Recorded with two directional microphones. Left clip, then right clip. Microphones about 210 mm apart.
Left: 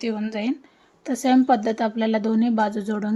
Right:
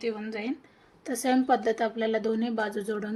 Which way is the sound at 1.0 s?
40° left (ahead or behind).